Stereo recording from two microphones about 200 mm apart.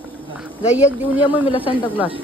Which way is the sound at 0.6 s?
5° right (ahead or behind).